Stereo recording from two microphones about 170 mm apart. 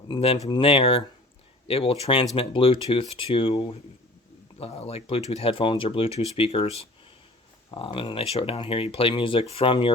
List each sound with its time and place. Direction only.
0.1 s speech: 35° left (ahead or behind)